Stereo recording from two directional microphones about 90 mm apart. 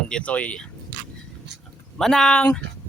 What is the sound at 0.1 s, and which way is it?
Speech, 15° left (ahead or behind).